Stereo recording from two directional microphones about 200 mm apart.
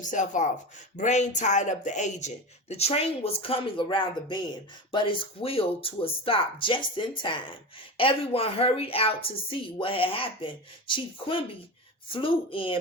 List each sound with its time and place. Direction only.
0.0 s a woman's voice: 40° left (ahead or behind)